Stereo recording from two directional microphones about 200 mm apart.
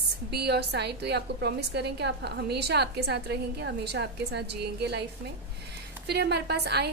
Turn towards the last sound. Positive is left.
turn(degrees=-55)  # may be behind; listen again after turning